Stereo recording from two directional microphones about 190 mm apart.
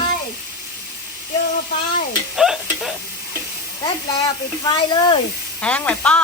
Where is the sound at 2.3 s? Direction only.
Centre (ahead or behind).